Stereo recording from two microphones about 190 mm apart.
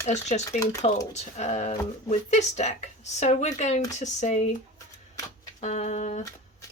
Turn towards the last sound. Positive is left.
turn(degrees=40)  # may be behind; listen again after turning